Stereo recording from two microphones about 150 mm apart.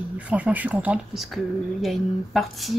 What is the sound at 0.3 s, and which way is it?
Speech, 10° right (ahead or behind).